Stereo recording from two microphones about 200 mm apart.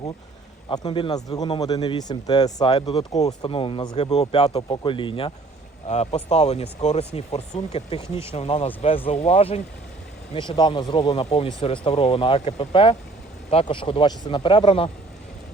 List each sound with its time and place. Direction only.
0.7 s speech: 20° left (ahead or behind)